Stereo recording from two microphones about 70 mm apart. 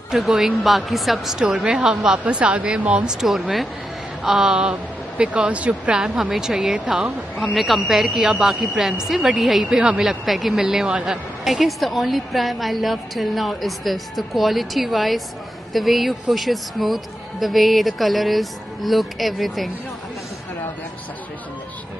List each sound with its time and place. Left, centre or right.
0.1 s a woman's voice: centre
3.2 s a woman's voice: centre